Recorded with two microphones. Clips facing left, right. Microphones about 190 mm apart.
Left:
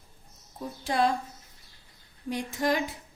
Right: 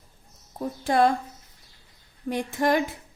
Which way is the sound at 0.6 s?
55° right (ahead or behind).